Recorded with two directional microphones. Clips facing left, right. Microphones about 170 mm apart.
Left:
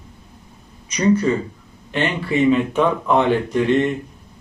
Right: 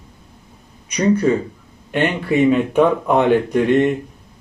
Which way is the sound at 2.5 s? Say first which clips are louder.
Right 2 dB; 50° right (ahead or behind).